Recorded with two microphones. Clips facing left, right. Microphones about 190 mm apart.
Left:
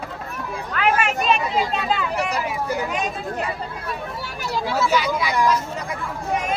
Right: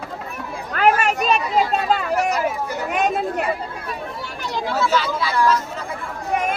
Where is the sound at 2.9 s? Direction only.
60° right (ahead or behind).